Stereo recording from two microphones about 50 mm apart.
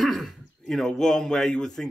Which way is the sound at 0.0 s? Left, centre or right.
Centre.